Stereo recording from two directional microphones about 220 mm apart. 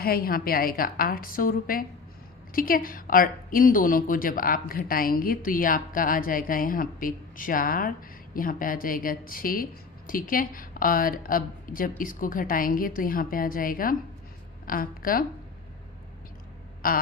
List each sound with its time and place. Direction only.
0.0 s a woman's voice: 40° left (ahead or behind)
16.8 s a woman's voice: 40° left (ahead or behind)